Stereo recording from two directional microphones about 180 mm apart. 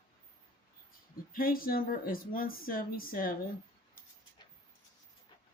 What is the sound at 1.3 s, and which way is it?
Speech, 50° left (ahead or behind).